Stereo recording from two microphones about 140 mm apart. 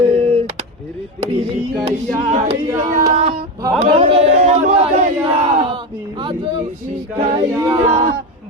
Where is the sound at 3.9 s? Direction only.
45° right (ahead or behind).